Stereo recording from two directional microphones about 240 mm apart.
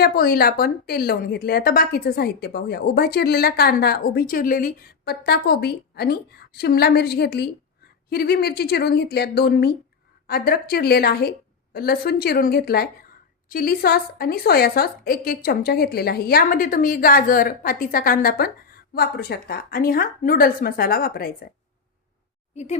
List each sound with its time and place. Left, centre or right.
0.0 s a woman's voice: left
22.5 s a woman's voice: left